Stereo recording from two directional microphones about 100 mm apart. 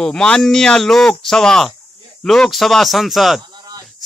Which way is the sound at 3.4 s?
45° right (ahead or behind).